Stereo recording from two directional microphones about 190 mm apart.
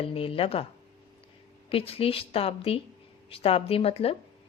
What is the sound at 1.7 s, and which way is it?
A woman's voice, 30° left (ahead or behind).